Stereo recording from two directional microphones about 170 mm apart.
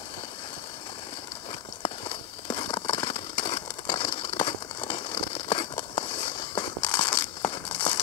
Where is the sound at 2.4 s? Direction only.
25° left (ahead or behind).